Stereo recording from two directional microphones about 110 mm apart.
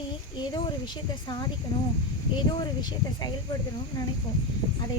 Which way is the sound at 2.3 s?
40° left (ahead or behind).